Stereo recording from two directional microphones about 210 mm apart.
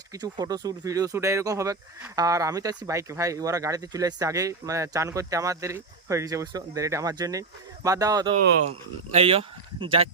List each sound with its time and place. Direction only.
0.1 s speech: 20° right (ahead or behind)